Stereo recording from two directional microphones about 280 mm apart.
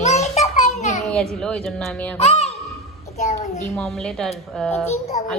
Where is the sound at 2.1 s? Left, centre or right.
Left.